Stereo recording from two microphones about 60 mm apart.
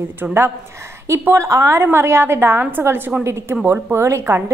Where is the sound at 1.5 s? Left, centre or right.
Right.